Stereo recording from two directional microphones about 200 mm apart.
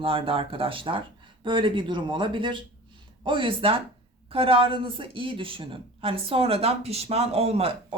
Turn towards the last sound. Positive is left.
turn(degrees=-30)  # may be behind; listen again after turning